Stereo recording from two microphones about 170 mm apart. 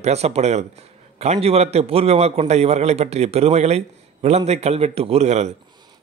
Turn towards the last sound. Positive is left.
turn(degrees=-40)  # may be behind; listen again after turning